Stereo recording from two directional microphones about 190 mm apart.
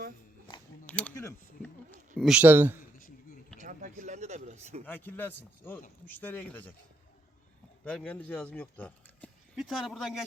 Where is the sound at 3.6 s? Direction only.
40° right (ahead or behind).